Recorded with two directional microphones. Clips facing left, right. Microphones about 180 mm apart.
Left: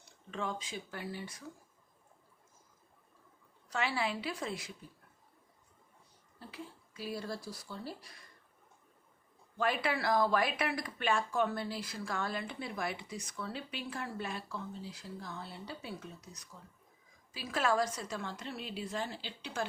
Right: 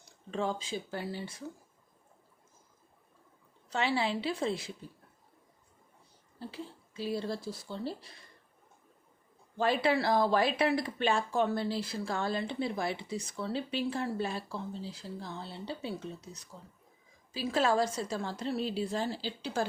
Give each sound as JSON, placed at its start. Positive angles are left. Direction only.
{"t": 0.0, "sound": "speech", "side_deg": -35}
{"t": 3.7, "sound": "speech", "side_deg": -25}
{"t": 6.4, "sound": "speech", "side_deg": -30}
{"t": 9.6, "sound": "a woman's voice", "side_deg": -30}